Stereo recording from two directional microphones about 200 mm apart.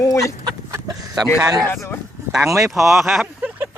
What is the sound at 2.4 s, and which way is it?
Speech, 15° right (ahead or behind).